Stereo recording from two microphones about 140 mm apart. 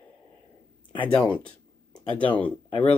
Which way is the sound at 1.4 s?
10° left (ahead or behind).